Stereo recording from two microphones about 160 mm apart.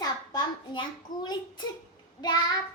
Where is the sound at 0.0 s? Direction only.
25° left (ahead or behind).